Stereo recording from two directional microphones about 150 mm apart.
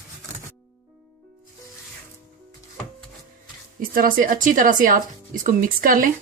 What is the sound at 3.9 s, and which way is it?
A woman's voice, 70° right (ahead or behind).